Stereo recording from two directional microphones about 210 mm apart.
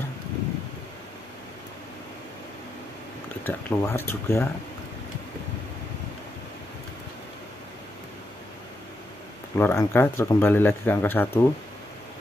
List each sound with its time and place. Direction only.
3.4 s speech: 10° left (ahead or behind)
9.6 s speech: 10° left (ahead or behind)